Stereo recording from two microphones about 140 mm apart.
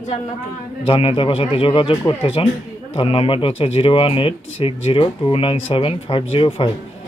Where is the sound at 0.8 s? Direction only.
40° left (ahead or behind).